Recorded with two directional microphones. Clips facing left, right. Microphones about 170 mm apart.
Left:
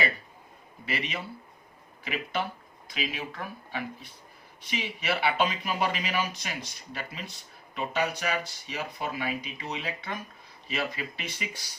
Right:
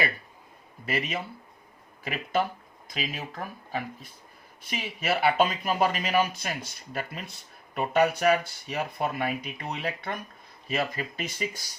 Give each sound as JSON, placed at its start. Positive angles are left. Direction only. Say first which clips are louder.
{"t": 0.9, "sound": "speech", "louder": "right 3 dB", "side_deg": -45}